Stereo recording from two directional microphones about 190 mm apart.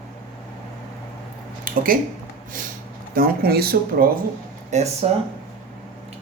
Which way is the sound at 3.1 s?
50° right (ahead or behind).